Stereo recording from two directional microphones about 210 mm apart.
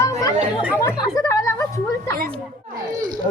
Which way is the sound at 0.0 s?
15° left (ahead or behind).